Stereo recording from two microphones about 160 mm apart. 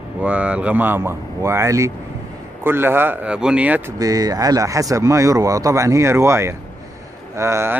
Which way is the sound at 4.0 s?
25° right (ahead or behind).